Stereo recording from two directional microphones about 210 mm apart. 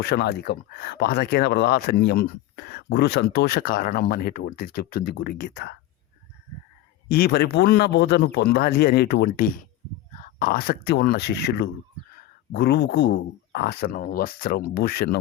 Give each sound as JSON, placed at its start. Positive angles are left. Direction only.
{"t": 0.0, "sound": "speech", "side_deg": 50}
{"t": 7.1, "sound": "speech", "side_deg": 45}